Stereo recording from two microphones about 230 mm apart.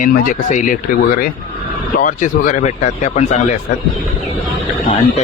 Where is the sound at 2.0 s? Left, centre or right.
Left.